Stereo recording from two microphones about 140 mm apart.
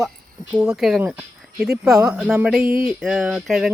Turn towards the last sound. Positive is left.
turn(degrees=-5)  # may be behind; listen again after turning